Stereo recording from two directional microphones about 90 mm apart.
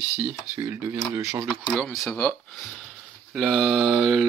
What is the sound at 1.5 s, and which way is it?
Speech, 5° left (ahead or behind).